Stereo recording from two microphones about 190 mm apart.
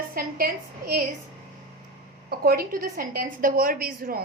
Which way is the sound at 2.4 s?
50° right (ahead or behind).